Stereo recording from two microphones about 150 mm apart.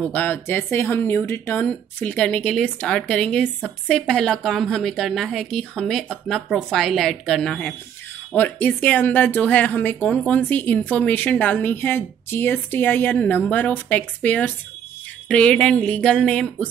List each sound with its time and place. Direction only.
0.0 s a woman's voice: 10° left (ahead or behind)